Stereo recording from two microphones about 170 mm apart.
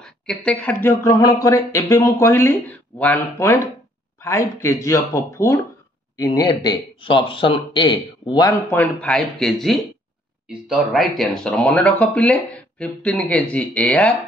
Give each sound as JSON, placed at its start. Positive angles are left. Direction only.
{"t": 0.0, "sound": "speech", "side_deg": 5}
{"t": 8.7, "sound": "speech", "side_deg": 5}